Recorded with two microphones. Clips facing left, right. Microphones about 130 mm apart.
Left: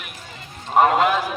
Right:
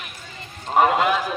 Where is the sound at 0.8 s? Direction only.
Centre (ahead or behind).